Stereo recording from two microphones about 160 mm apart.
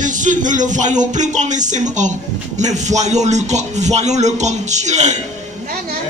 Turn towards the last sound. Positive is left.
turn(degrees=-45)  # may be behind; listen again after turning